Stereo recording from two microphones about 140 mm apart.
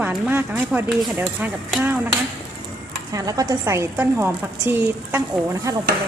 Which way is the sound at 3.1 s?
25° right (ahead or behind).